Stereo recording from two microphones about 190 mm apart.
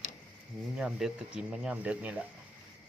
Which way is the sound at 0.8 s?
5° right (ahead or behind).